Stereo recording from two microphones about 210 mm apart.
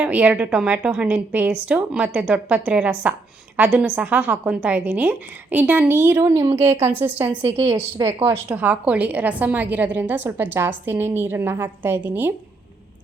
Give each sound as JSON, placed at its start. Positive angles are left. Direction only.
{"t": 0.0, "sound": "a woman's voice", "side_deg": -5}
{"t": 7.5, "sound": "a woman's voice", "side_deg": -30}
{"t": 7.8, "sound": "a woman's voice", "side_deg": -10}